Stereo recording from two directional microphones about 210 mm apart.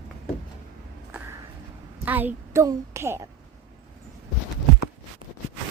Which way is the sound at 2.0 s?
10° right (ahead or behind).